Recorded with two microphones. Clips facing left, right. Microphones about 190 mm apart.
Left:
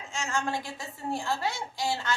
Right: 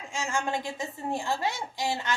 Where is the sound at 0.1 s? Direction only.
15° right (ahead or behind).